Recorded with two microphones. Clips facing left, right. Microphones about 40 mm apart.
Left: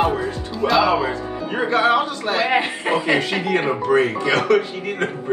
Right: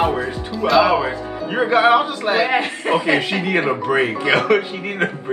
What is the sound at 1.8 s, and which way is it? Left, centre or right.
Speech, right.